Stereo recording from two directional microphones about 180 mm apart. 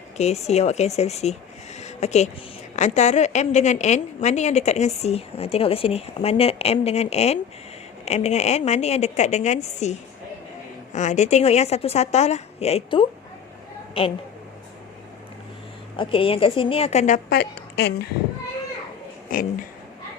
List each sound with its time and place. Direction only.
0.2 s a woman's voice: 35° left (ahead or behind)
10.9 s a woman's voice: 40° left (ahead or behind)
16.0 s a woman's voice: 30° left (ahead or behind)
17.2 s a woman's voice: 65° left (ahead or behind)
19.3 s speech: 50° left (ahead or behind)